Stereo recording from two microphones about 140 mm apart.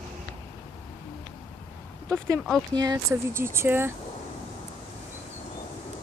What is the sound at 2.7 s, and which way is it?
Speech, 30° right (ahead or behind).